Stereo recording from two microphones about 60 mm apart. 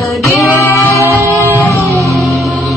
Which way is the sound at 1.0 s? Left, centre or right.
Right.